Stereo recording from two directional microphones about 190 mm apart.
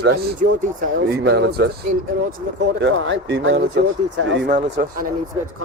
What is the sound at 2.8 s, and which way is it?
Speech, 75° right (ahead or behind).